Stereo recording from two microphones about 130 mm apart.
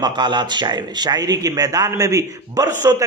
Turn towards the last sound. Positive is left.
turn(degrees=-25)  # may be behind; listen again after turning